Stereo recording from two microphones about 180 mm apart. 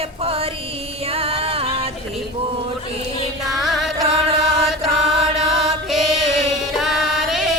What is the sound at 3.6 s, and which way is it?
Music, centre (ahead or behind).